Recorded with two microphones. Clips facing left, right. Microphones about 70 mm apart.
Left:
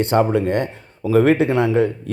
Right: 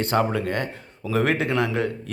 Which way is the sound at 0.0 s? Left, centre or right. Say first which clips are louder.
Left 6 dB; left.